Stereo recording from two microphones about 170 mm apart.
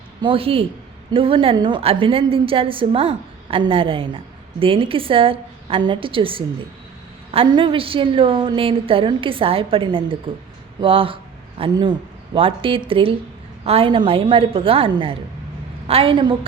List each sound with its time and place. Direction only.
0.2 s a woman's voice: 30° right (ahead or behind)